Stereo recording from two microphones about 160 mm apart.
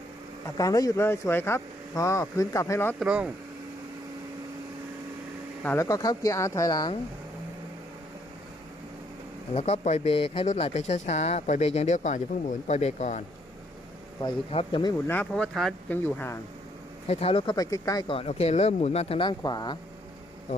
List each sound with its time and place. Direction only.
0.5 s speech: 20° left (ahead or behind)
3.0 s speech: 5° right (ahead or behind)
5.6 s speech: 20° left (ahead or behind)
9.6 s speech: 40° left (ahead or behind)
14.2 s speech: 30° left (ahead or behind)
15.0 s speech: 10° left (ahead or behind)
17.1 s speech: 40° left (ahead or behind); by 18.0 s 20° left (ahead or behind)
18.1 s speech: 40° left (ahead or behind)